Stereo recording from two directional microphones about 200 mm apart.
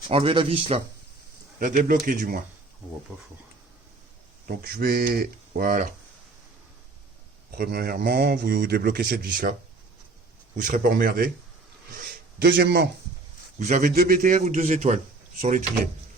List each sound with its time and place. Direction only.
0.1 s speech: 25° right (ahead or behind)
1.5 s a man's voice: 45° right (ahead or behind)
4.4 s a man's voice: 50° right (ahead or behind)
7.5 s a man's voice: 50° right (ahead or behind)
10.6 s a man's voice: 45° right (ahead or behind)
11.9 s a sound: 55° right (ahead or behind)
13.7 s a man's voice: 45° right (ahead or behind)